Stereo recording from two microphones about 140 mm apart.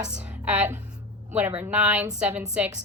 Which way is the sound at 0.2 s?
10° right (ahead or behind).